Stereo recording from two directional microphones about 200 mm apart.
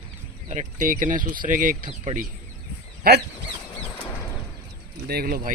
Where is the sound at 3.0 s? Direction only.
50° right (ahead or behind).